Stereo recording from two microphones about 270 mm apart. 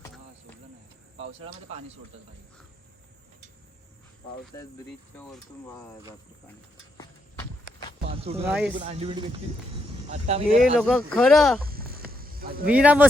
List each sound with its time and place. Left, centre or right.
5.1 s speech: centre
6.9 s walk: centre
8.1 s a sound: right
8.4 s speech: centre
8.7 s speech: right
10.6 s speech: centre
11.7 s cricket: right
12.6 s speech: centre